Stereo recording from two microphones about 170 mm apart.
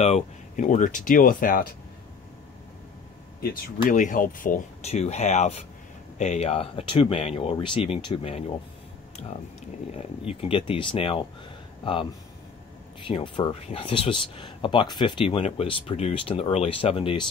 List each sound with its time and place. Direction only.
0.0 s speech: 40° left (ahead or behind)
3.3 s speech: 55° left (ahead or behind); by 8.5 s 35° left (ahead or behind)
10.2 s speech: 35° left (ahead or behind)